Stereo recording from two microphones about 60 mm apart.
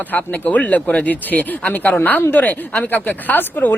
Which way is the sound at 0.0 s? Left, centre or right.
Left.